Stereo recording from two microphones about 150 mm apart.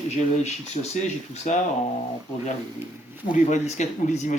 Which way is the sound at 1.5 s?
50° left (ahead or behind).